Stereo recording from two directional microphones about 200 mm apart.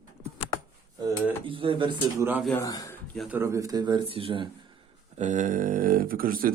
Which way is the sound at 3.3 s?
15° right (ahead or behind).